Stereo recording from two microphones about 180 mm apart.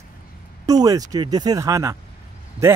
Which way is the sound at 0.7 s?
20° right (ahead or behind).